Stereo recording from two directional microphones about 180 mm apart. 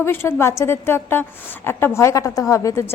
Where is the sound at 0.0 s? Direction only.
15° left (ahead or behind).